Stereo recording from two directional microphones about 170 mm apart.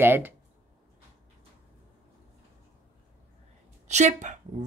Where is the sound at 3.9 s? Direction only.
45° right (ahead or behind).